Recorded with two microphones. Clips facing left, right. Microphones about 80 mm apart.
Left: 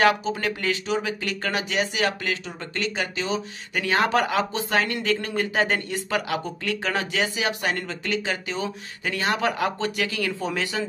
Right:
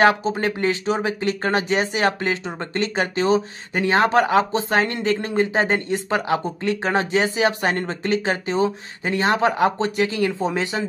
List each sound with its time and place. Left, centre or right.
0.0 s speech: right
3.7 s speech: right